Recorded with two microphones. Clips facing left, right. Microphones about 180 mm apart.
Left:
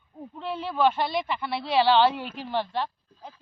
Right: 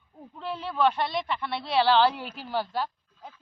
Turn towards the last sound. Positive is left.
turn(degrees=-5)  # may be behind; listen again after turning